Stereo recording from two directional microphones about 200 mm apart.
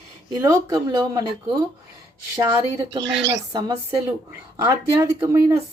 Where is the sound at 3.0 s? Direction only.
65° right (ahead or behind).